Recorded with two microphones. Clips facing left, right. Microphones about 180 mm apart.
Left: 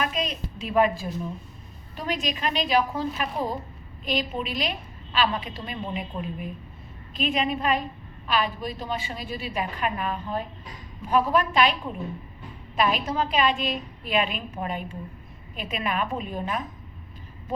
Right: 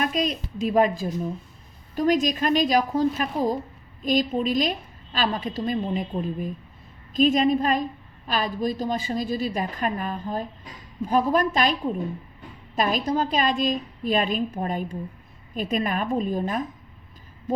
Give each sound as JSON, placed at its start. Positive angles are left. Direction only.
{"t": 0.0, "sound": "a woman's voice", "side_deg": -40}
{"t": 2.0, "sound": "a woman's voice", "side_deg": -45}